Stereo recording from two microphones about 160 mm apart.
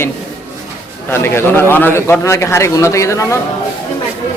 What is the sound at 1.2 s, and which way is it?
A man's voice, 15° left (ahead or behind).